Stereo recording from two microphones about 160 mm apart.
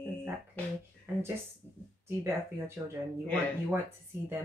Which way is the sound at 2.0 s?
15° right (ahead or behind).